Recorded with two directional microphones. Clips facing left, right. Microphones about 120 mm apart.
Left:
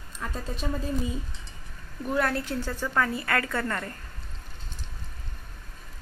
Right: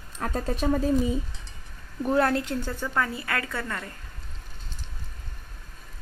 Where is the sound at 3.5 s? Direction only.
5° right (ahead or behind).